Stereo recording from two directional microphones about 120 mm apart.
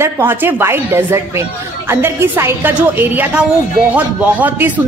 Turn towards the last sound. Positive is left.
turn(degrees=-15)  # may be behind; listen again after turning